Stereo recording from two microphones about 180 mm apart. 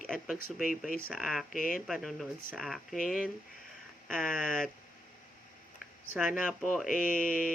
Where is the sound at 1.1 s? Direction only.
Centre (ahead or behind).